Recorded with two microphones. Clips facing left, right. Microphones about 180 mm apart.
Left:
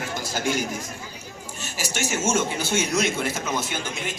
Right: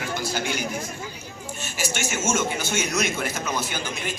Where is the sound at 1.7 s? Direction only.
35° left (ahead or behind).